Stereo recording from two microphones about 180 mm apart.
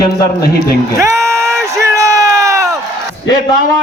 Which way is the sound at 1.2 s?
15° right (ahead or behind).